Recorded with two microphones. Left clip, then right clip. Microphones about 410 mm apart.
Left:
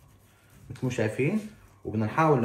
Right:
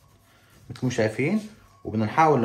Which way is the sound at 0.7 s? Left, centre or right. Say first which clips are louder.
Right 4 dB; centre.